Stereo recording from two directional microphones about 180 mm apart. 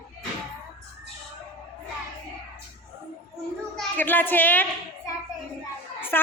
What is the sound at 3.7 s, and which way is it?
Speech, 10° left (ahead or behind).